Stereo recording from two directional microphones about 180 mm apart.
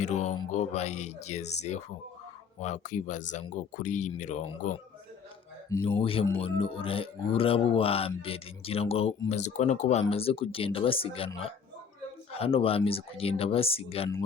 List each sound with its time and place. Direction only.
0.0 s mantra: 40° left (ahead or behind)
0.5 s speech: 40° left (ahead or behind)
6.0 s speech: 30° left (ahead or behind)
12.3 s speech: 30° left (ahead or behind)